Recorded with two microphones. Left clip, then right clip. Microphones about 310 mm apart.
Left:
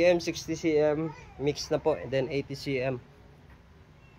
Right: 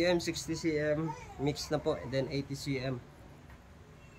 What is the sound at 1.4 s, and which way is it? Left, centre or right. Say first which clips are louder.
Speech: left 6 dB; centre.